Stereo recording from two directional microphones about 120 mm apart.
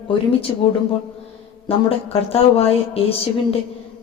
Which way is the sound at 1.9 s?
55° left (ahead or behind).